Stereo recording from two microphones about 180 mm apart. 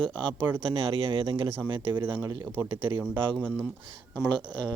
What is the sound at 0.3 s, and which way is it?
Speech, 10° right (ahead or behind).